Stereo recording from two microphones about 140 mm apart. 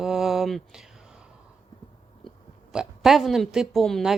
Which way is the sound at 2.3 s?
5° right (ahead or behind).